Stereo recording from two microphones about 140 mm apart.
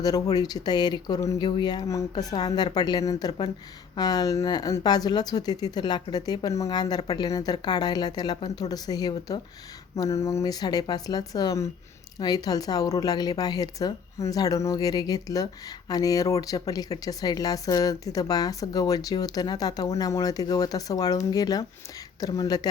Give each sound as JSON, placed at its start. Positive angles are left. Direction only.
{"t": 0.0, "sound": "speech", "side_deg": 25}